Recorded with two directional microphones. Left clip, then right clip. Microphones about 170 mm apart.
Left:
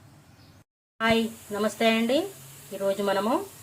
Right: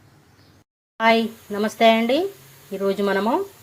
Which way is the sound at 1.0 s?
25° right (ahead or behind).